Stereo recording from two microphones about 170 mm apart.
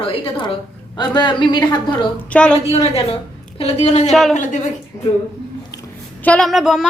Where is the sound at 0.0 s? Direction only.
30° left (ahead or behind).